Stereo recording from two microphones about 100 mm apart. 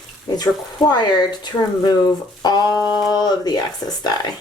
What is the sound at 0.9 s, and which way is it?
Speech, 45° left (ahead or behind).